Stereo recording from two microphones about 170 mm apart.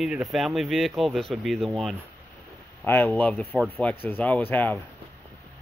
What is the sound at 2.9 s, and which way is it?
Speech, 10° left (ahead or behind).